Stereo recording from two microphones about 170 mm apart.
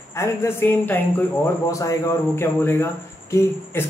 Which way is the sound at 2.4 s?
15° left (ahead or behind).